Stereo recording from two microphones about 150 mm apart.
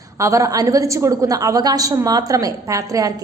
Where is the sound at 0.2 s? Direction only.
20° right (ahead or behind).